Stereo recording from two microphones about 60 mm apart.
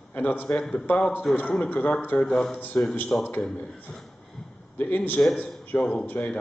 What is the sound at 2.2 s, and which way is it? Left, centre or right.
Speech, centre.